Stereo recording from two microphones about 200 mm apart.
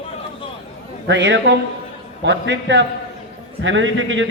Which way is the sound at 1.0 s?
60° right (ahead or behind).